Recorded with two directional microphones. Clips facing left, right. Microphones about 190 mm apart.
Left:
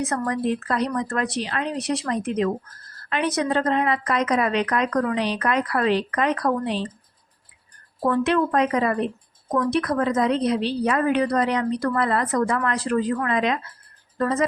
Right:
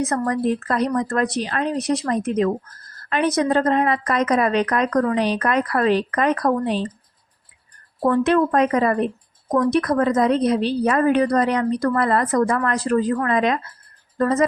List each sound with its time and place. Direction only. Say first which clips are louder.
0.1 s a woman's voice: right 3 dB; 45° right (ahead or behind)
8.0 s a woman's voice: right 3 dB; 45° right (ahead or behind)